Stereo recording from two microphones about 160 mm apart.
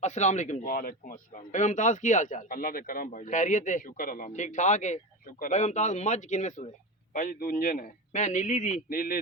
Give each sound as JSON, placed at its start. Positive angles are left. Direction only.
{"t": 0.0, "sound": "a man's voice", "side_deg": 50}
{"t": 7.1, "sound": "a man's voice", "side_deg": 65}